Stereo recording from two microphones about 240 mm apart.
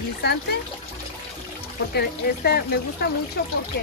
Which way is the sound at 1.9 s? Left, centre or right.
Left.